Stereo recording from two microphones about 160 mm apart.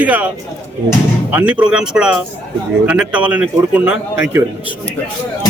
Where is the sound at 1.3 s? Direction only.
10° right (ahead or behind).